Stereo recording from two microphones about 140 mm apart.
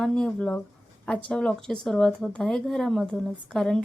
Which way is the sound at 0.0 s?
5° left (ahead or behind).